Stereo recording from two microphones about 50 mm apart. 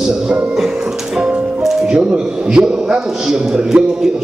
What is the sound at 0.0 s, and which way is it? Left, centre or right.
Music, centre.